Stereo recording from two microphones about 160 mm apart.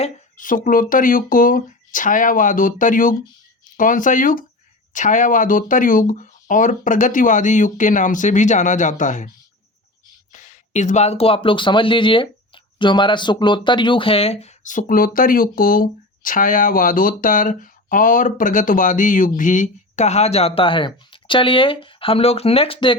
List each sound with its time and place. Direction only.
0.0 s speech: 55° left (ahead or behind)
10.3 s speech: 50° left (ahead or behind); by 23.0 s 35° left (ahead or behind)